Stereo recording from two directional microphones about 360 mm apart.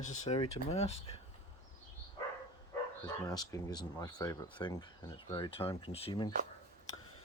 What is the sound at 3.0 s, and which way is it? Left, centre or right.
Speech, centre.